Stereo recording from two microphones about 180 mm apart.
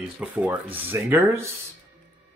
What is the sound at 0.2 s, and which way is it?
Speech, 5° right (ahead or behind).